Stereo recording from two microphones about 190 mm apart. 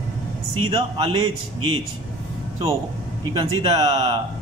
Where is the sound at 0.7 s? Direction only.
25° right (ahead or behind).